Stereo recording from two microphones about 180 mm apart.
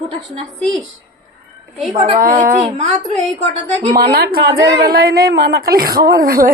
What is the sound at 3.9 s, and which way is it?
A woman's voice, 60° right (ahead or behind).